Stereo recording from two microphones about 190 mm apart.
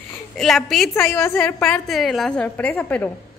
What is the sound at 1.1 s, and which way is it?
Speech, 15° left (ahead or behind).